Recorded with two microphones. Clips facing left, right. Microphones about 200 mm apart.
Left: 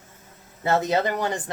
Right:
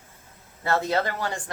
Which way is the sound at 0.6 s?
20° left (ahead or behind).